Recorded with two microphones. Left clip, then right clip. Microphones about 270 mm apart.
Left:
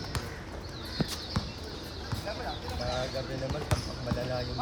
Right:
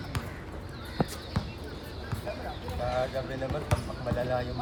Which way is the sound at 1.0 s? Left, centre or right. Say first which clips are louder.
Right 3 dB; centre.